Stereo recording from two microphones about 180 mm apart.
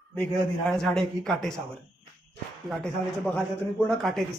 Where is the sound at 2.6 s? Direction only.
5° left (ahead or behind).